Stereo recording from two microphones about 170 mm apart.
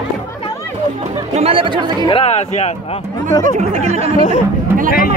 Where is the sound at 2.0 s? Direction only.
35° left (ahead or behind).